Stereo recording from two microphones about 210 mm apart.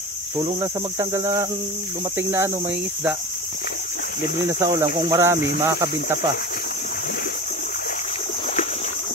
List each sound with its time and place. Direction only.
0.4 s cricket: 15° right (ahead or behind)
4.5 s cricket: 15° right (ahead or behind)